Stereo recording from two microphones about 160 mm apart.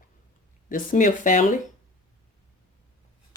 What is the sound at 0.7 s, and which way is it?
Speech, 55° left (ahead or behind).